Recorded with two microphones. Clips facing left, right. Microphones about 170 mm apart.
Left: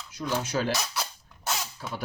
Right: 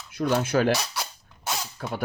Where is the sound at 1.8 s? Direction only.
60° right (ahead or behind).